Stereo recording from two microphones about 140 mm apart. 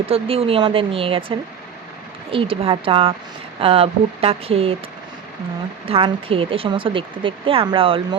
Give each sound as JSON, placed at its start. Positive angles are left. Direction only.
{"t": 0.1, "sound": "speech", "side_deg": -45}
{"t": 5.9, "sound": "speech", "side_deg": -40}